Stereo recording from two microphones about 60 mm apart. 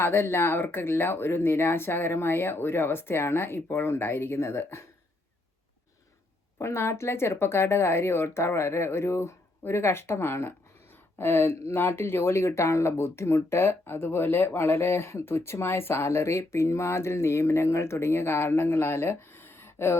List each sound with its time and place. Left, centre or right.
0.0 s speech: left
6.6 s speech: left